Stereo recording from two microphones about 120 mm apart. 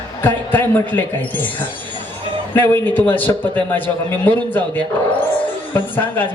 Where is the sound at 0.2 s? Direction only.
15° left (ahead or behind).